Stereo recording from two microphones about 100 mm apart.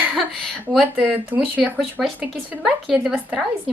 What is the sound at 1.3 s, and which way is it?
Speech, 20° right (ahead or behind).